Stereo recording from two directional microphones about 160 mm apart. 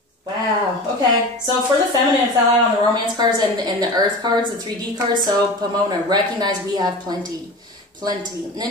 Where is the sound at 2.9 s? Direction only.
25° right (ahead or behind).